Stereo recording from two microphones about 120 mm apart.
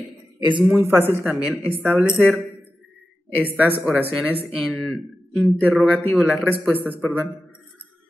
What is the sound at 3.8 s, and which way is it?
Speech, 10° right (ahead or behind).